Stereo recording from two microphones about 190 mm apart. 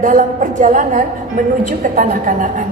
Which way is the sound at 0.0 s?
45° right (ahead or behind).